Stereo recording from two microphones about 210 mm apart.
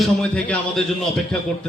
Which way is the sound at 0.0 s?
5° left (ahead or behind).